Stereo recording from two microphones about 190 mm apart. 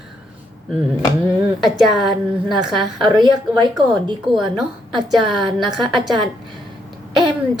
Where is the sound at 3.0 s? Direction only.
20° right (ahead or behind).